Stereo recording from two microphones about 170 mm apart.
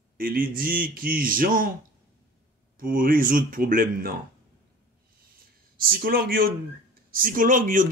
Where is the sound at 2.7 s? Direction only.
55° right (ahead or behind).